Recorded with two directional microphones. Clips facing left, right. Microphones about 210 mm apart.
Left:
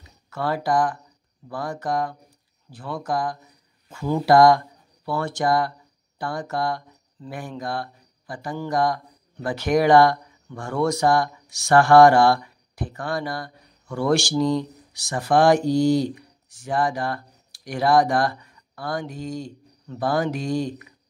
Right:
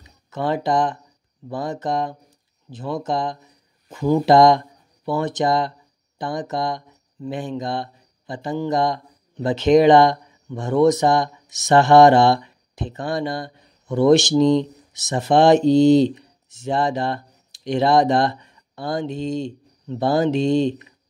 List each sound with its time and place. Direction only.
0.0 s speech: 20° right (ahead or behind)